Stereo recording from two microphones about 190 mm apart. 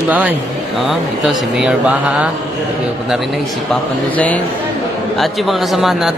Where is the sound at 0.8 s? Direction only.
Centre (ahead or behind).